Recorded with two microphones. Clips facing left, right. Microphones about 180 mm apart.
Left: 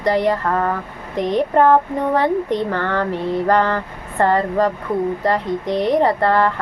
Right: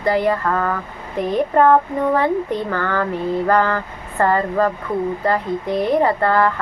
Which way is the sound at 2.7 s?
25° left (ahead or behind).